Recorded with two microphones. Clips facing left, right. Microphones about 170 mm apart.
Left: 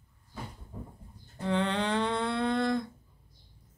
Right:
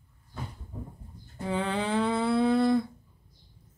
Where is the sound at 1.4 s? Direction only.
5° right (ahead or behind).